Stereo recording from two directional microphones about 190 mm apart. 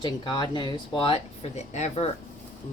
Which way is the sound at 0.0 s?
25° left (ahead or behind).